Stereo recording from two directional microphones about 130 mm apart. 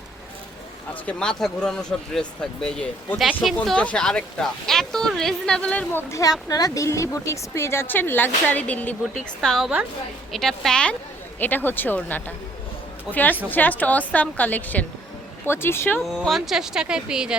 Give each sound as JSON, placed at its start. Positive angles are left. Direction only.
{"t": 1.0, "sound": "a woman's voice", "side_deg": 5}
{"t": 16.0, "sound": "speech", "side_deg": 0}